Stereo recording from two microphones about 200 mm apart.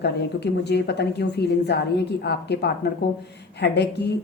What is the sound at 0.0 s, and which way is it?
Speech, 55° left (ahead or behind).